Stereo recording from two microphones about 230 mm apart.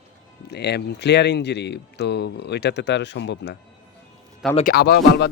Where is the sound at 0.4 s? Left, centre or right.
Left.